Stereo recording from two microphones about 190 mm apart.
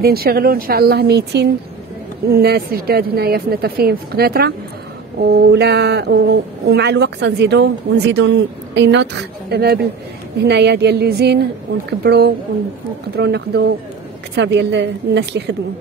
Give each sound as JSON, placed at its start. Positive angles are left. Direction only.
{"t": 0.0, "sound": "speech", "side_deg": -55}